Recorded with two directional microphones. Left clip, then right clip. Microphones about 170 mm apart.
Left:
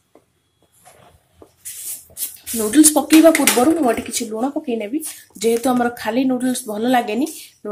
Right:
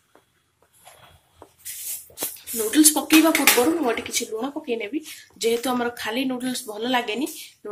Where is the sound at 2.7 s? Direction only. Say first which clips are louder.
Left 5 dB; 55° left (ahead or behind).